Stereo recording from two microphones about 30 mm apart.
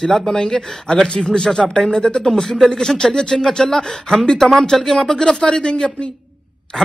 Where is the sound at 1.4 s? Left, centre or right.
Centre.